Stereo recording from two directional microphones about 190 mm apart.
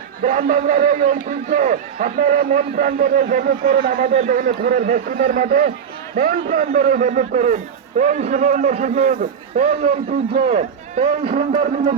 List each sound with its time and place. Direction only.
0.2 s a man's voice: 45° right (ahead or behind)